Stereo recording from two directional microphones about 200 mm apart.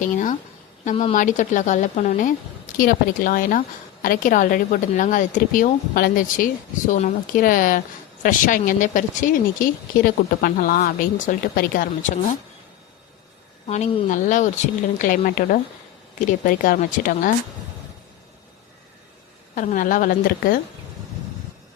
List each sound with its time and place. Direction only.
0.0 s a woman's voice: 40° left (ahead or behind)
13.7 s speech: 35° left (ahead or behind)
19.5 s speech: 40° left (ahead or behind)